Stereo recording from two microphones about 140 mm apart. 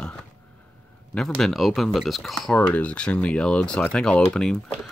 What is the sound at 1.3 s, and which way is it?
Speech, centre (ahead or behind).